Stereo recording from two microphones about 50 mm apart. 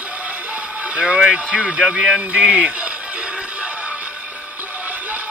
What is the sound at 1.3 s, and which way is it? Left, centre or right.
Speech, right.